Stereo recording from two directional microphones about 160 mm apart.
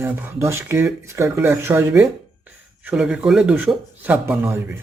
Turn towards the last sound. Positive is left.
turn(degrees=-15)  # may be behind; listen again after turning